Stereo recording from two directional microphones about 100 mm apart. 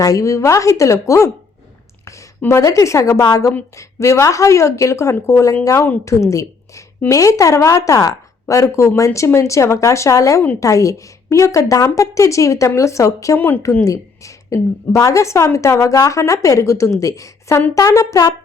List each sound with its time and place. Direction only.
0.0 s a woman's voice: 35° left (ahead or behind)
2.4 s a woman's voice: 30° left (ahead or behind)
13.3 s a woman's voice: 20° left (ahead or behind)
13.8 s a woman's voice: 30° left (ahead or behind)